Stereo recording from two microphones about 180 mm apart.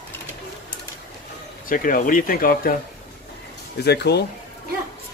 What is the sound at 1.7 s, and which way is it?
Speech, 50° left (ahead or behind).